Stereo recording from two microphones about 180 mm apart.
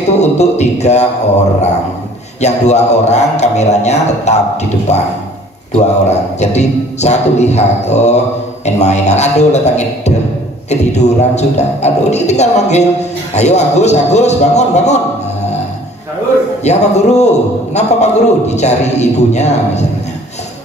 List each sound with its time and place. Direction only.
0.2 s a man's voice: 40° left (ahead or behind)
2.4 s a man's voice: 40° left (ahead or behind)
16.6 s a man's voice: 40° left (ahead or behind)